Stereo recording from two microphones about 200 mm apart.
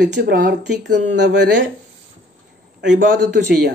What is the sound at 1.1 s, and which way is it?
Speech, 60° right (ahead or behind).